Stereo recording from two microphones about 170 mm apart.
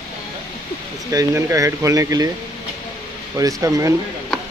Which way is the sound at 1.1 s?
20° right (ahead or behind).